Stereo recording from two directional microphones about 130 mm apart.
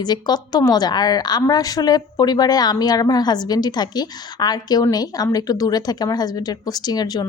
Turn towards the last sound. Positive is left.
turn(degrees=30)  # may be behind; listen again after turning